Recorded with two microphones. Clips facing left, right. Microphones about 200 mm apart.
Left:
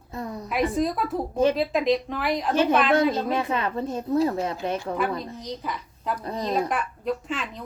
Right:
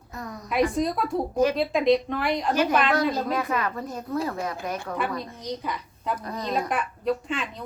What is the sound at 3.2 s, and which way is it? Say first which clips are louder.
A woman's voice: left 1 dB; 25° left (ahead or behind).